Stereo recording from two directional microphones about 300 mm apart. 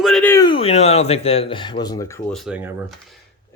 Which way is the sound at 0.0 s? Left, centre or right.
Centre.